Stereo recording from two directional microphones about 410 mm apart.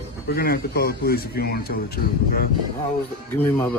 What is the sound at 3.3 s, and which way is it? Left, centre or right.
Speech, centre.